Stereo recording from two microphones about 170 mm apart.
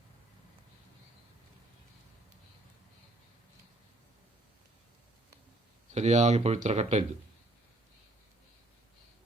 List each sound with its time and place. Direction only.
5.9 s speech: 40° right (ahead or behind)